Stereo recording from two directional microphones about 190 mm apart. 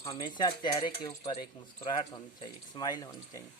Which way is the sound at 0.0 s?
20° left (ahead or behind).